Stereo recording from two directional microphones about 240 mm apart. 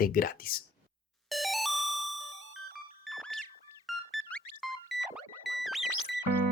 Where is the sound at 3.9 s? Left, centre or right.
Centre.